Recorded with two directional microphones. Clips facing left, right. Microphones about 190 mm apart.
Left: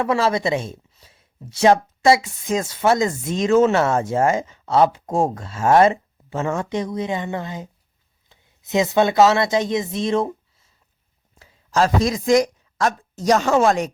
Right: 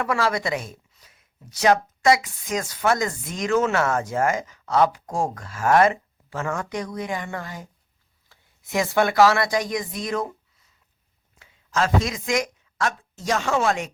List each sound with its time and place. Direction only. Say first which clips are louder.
0.0 s speech: left 4 dB; 25° left (ahead or behind)